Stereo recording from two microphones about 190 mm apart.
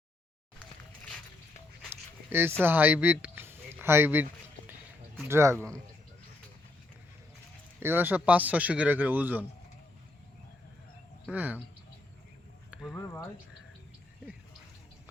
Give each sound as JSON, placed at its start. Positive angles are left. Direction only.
{"t": 0.6, "sound": "a sound", "side_deg": 5}
{"t": 1.9, "sound": "dog", "side_deg": -10}
{"t": 2.6, "sound": "a sound", "side_deg": -10}
{"t": 5.3, "sound": "a man's voice", "side_deg": -15}
{"t": 7.8, "sound": "a man's voice", "side_deg": -10}
{"t": 11.3, "sound": "a man's voice", "side_deg": -10}
{"t": 12.7, "sound": "speech", "side_deg": 0}
{"t": 13.1, "sound": "speech", "side_deg": 20}